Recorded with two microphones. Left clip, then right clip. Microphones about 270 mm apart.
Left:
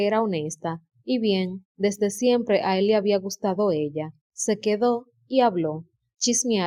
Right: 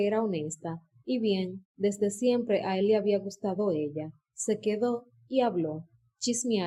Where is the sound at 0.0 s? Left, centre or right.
Left.